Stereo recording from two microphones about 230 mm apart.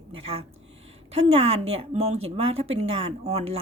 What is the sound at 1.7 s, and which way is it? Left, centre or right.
A woman's voice, right.